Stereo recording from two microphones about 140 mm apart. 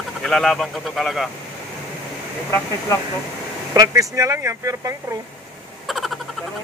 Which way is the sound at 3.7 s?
25° right (ahead or behind).